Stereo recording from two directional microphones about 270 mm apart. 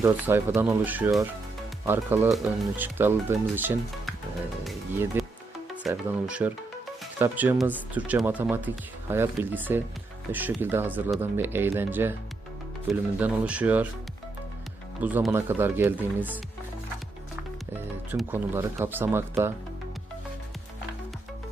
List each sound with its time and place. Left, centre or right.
0.0 s speech: centre
15.0 s speech: centre
18.1 s speech: centre